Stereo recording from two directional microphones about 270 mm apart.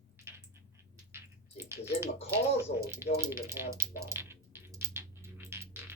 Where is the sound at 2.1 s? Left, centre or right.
Left.